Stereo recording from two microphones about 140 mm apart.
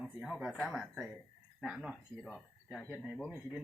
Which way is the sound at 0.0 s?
5° right (ahead or behind).